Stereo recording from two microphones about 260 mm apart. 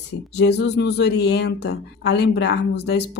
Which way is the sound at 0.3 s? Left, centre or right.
Left.